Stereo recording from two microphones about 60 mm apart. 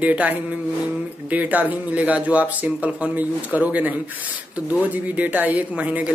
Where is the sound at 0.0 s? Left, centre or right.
Right.